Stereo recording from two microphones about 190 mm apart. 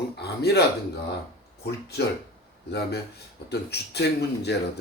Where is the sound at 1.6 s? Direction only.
60° left (ahead or behind).